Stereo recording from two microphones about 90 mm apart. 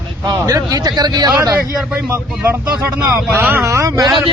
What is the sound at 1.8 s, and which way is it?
Speech, 10° right (ahead or behind).